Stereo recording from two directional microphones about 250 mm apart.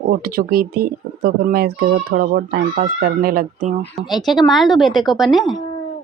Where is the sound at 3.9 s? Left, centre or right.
Centre.